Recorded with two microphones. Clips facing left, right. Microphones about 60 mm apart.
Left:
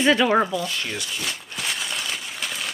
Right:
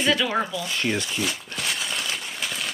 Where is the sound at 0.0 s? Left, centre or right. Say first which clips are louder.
Left 5 dB; left.